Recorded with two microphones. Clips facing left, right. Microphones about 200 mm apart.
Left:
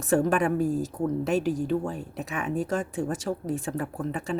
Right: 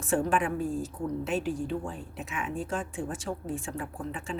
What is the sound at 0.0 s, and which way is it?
A woman's voice, 40° left (ahead or behind).